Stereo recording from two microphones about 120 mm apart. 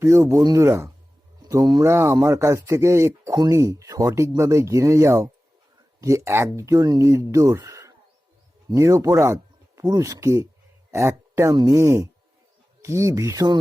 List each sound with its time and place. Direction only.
0.0 s speech: 25° right (ahead or behind)
1.9 s speech: 20° right (ahead or behind)